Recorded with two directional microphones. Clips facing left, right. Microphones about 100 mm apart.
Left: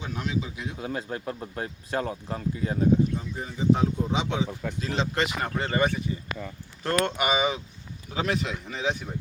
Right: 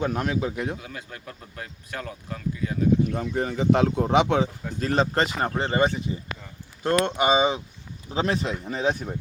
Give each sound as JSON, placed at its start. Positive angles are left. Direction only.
{"t": 0.0, "sound": "speech", "side_deg": -55}
{"t": 0.8, "sound": "speech", "side_deg": 30}
{"t": 3.1, "sound": "speech", "side_deg": -75}